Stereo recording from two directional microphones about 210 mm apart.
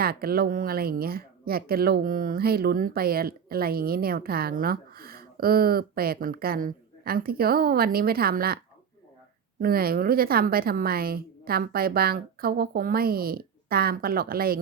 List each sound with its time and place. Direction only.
0.0 s a woman's voice: 45° right (ahead or behind)
9.6 s a woman's voice: 45° right (ahead or behind)